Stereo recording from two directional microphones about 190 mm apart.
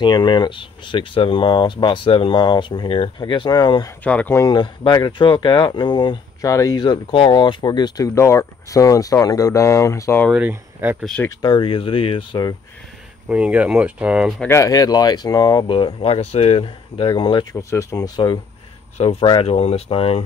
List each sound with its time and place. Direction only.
0.0 s speech: 25° left (ahead or behind)
4.0 s speech: 10° left (ahead or behind)
10.3 s speech: 10° right (ahead or behind)
11.2 s speech: 25° left (ahead or behind)
13.3 s speech: 5° right (ahead or behind)
14.5 s speech: 20° left (ahead or behind)